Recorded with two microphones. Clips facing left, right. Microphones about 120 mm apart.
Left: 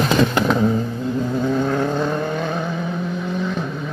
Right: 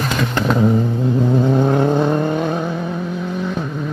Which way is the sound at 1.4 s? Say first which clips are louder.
Right 2 dB; 20° right (ahead or behind).